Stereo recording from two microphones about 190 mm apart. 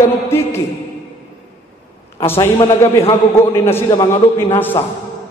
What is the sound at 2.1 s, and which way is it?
Speech, 15° left (ahead or behind).